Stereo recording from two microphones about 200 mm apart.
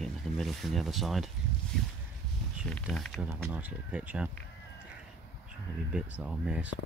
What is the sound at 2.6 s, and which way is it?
Speech, 5° left (ahead or behind).